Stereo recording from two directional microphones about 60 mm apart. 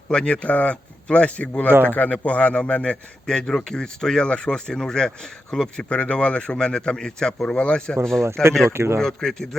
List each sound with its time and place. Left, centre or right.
0.1 s a man's voice: centre
8.7 s speech: right
9.0 s a man's voice: centre